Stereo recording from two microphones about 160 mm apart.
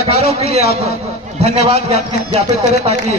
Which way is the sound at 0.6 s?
80° left.